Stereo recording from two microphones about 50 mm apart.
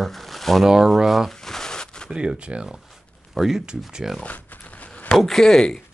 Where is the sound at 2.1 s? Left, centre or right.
Centre.